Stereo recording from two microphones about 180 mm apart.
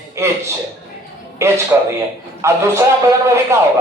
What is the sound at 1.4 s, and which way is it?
A man's voice, 15° right (ahead or behind).